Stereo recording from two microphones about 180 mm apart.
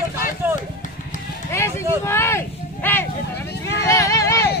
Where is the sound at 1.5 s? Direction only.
15° left (ahead or behind).